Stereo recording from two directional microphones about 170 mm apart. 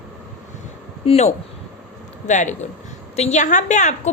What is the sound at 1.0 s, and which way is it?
A woman's voice, 40° left (ahead or behind).